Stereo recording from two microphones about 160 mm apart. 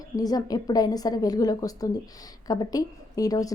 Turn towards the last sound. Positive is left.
turn(degrees=20)  # may be behind; listen again after turning